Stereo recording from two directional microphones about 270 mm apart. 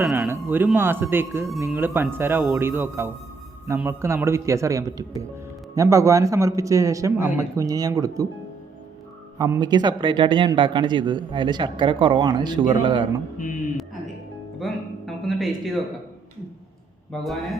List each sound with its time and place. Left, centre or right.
0.0 s a man's voice: centre
9.4 s a man's voice: centre
14.6 s a sound: centre
17.1 s speech: centre